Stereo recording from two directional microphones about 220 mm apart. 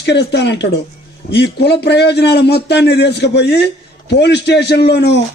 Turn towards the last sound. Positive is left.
turn(degrees=50)  # may be behind; listen again after turning